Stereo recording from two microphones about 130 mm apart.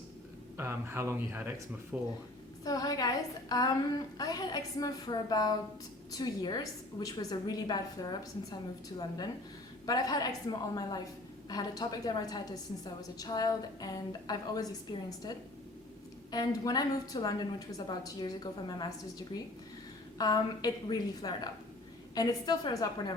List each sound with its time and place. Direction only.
0.5 s speech: 20° right (ahead or behind)
2.6 s a woman's voice: 30° left (ahead or behind)
16.3 s a woman's voice: 30° left (ahead or behind)